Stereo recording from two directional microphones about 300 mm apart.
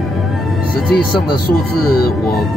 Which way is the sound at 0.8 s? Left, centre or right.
Left.